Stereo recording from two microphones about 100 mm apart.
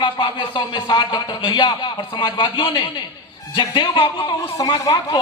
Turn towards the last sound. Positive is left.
turn(degrees=40)  # may be behind; listen again after turning